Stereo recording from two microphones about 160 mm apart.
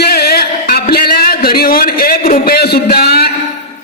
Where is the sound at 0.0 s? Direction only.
80° left.